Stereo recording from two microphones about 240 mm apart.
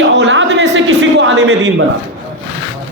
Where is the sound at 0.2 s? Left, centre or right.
Right.